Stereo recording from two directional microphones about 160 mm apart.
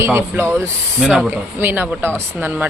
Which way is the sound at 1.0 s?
Centre (ahead or behind).